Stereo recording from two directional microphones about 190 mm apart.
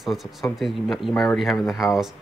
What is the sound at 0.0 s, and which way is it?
Speech, centre (ahead or behind).